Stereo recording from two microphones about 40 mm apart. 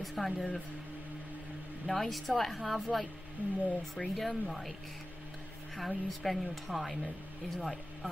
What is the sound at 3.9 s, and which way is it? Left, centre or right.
Speech, centre.